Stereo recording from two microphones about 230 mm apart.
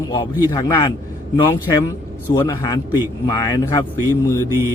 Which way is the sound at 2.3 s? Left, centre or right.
Centre.